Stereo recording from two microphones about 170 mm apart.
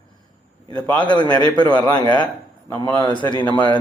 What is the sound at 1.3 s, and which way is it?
Speech, 25° right (ahead or behind).